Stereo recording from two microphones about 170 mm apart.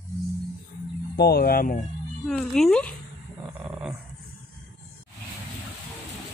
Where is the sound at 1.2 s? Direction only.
65° left (ahead or behind).